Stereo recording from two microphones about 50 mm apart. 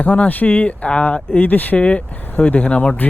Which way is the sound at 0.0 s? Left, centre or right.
Left.